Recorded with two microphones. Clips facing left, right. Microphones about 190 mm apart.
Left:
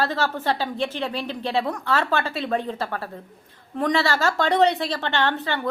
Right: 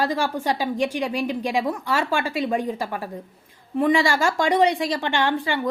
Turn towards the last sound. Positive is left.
turn(degrees=-10)  # may be behind; listen again after turning